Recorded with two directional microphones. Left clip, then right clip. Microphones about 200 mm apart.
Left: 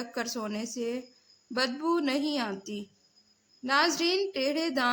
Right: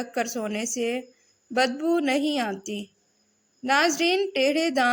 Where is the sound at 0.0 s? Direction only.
15° right (ahead or behind).